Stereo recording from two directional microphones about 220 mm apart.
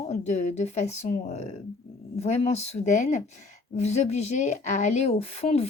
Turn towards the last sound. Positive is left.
turn(degrees=30)  # may be behind; listen again after turning